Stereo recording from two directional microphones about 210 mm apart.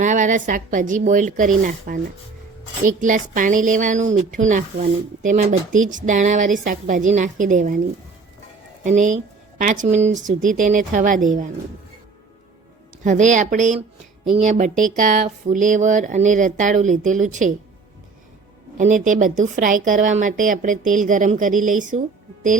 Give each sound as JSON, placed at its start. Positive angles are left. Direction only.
{"t": 0.0, "sound": "speech", "side_deg": -35}
{"t": 8.8, "sound": "speech", "side_deg": -35}
{"t": 13.0, "sound": "speech", "side_deg": -35}
{"t": 18.8, "sound": "speech", "side_deg": -35}